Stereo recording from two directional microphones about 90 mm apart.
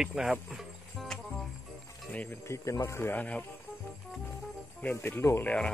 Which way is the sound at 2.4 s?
35° left (ahead or behind).